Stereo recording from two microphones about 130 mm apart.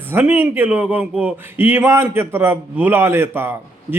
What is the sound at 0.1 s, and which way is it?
Speech, 15° right (ahead or behind).